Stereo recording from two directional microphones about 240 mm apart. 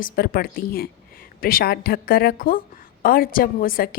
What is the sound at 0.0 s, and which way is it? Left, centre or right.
A woman's voice, left.